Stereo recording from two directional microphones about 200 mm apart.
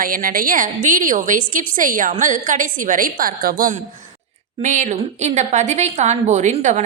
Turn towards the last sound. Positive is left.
turn(degrees=-35)  # may be behind; listen again after turning